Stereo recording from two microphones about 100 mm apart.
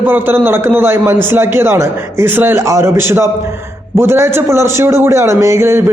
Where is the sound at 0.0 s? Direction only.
20° right (ahead or behind).